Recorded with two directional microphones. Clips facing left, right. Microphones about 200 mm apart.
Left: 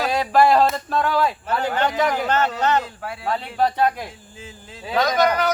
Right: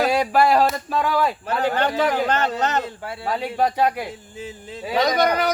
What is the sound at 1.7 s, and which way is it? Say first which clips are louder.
Speech: left 2 dB; 35° right (ahead or behind).